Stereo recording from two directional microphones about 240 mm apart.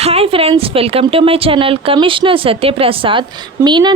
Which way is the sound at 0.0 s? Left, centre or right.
Right.